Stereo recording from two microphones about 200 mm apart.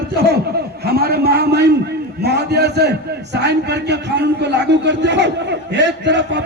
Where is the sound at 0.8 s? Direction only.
50° right (ahead or behind).